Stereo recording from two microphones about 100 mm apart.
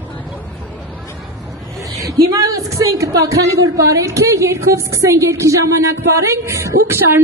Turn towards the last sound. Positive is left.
turn(degrees=-30)  # may be behind; listen again after turning